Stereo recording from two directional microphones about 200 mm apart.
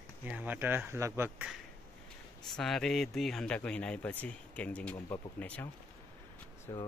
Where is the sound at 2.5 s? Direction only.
Centre (ahead or behind).